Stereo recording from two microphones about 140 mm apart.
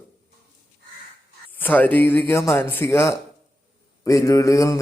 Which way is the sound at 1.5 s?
15° left (ahead or behind).